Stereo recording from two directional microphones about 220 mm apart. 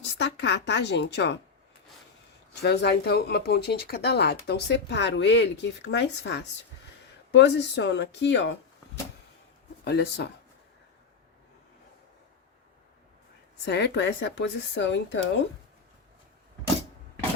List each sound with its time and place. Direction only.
0.2 s speech: 50° left (ahead or behind)
2.6 s speech: 50° left (ahead or behind)
9.8 s speech: 50° left (ahead or behind)
13.7 s speech: 50° left (ahead or behind)